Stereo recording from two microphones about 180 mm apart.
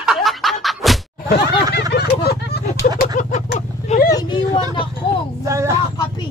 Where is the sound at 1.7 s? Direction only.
65° left (ahead or behind).